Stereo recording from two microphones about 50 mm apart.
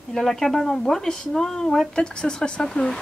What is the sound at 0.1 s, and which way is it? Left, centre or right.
A man's voice, centre.